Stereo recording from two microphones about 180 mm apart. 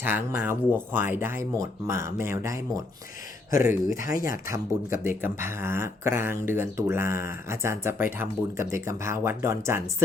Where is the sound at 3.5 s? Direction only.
50° left (ahead or behind).